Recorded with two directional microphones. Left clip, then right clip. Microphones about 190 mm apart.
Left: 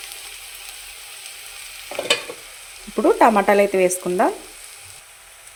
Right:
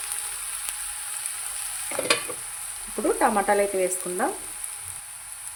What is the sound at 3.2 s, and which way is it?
Sizzle, 30° left (ahead or behind).